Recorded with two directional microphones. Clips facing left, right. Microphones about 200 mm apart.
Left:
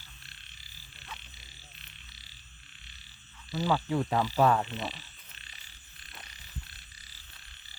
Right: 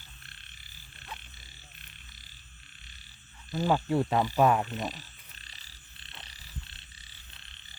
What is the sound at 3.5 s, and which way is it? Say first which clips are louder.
Speech: right 2 dB; 50° right (ahead or behind).